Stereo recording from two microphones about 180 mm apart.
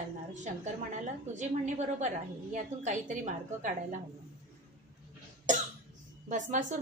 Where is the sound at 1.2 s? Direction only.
40° right (ahead or behind).